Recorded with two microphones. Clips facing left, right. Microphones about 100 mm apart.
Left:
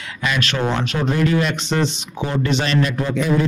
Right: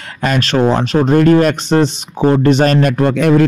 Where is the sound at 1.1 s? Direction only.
50° right (ahead or behind).